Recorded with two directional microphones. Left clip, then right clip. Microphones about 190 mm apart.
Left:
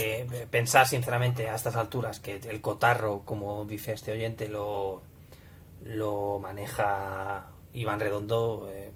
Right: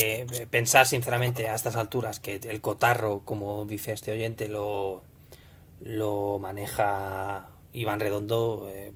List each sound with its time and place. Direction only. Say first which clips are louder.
0.0 s speech: right 3 dB; 30° right (ahead or behind)
5.9 s speech: right 2 dB; 35° right (ahead or behind)